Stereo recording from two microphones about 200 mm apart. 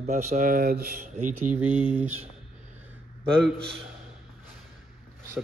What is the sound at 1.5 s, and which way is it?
Speech, 10° right (ahead or behind).